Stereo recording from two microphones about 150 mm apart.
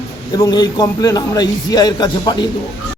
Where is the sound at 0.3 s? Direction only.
25° left (ahead or behind).